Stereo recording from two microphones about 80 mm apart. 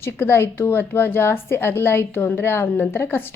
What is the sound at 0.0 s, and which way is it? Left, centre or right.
A woman's voice, left.